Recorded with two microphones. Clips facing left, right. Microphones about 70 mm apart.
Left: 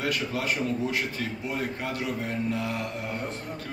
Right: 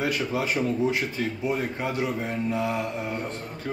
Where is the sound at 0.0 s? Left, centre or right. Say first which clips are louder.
Right 3 dB; centre.